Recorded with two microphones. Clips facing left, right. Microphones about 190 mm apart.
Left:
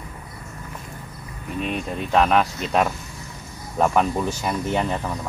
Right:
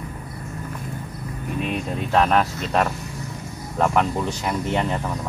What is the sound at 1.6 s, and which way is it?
Speech, centre (ahead or behind).